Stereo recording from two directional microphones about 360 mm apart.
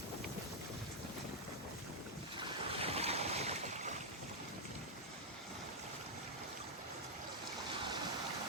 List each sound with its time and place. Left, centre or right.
2.4 s boat: centre